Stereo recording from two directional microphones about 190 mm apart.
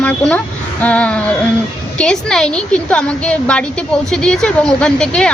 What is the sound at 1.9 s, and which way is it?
A woman's voice, 5° left (ahead or behind).